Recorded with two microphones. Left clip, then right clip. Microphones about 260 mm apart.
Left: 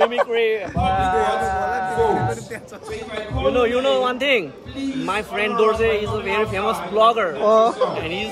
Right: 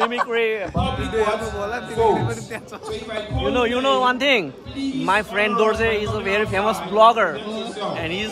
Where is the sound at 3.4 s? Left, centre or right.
Centre.